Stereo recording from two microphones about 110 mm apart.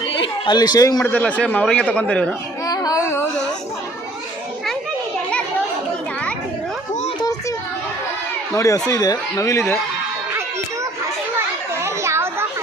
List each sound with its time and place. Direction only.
0.0 s a sound: 55° left (ahead or behind)
0.5 s a man's voice: 40° left (ahead or behind)
1.0 s speech: 15° left (ahead or behind)
2.6 s a sound: 35° left (ahead or behind)
8.5 s speech: 30° left (ahead or behind)
11.3 s children playing: 25° right (ahead or behind)